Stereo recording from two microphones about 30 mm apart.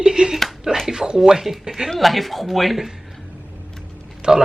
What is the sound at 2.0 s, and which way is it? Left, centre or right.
Speech, centre.